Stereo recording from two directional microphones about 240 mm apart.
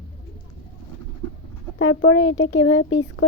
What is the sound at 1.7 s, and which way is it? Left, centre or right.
Speech, left.